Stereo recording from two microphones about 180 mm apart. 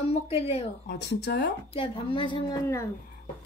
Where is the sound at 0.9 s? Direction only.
70° left (ahead or behind).